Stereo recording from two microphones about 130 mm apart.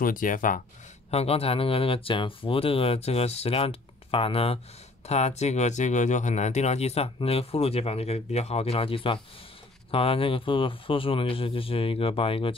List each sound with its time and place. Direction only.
0.0 s speech: 90° left
1.1 s speech: 50° left (ahead or behind)
5.0 s speech: 55° left (ahead or behind)